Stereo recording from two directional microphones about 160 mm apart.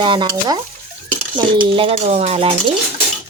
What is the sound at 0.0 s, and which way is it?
Speech, 30° right (ahead or behind).